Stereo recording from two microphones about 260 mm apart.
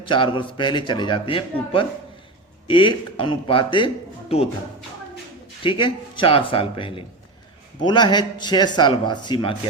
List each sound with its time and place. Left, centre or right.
0.1 s a man's voice: centre
5.6 s a man's voice: centre